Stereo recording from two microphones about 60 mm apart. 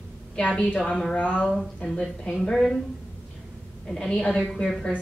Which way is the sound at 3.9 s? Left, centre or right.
Centre.